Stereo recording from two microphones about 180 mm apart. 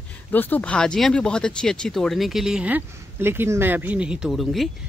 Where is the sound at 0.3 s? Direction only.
10° left (ahead or behind).